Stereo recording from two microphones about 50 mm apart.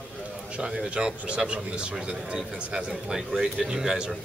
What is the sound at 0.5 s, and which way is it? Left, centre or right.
Speech, right.